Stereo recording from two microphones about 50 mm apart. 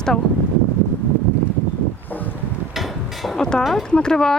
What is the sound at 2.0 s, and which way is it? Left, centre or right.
Boat, left.